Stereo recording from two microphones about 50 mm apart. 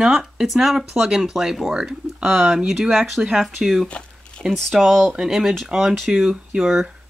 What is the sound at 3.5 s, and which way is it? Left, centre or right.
Speech, centre.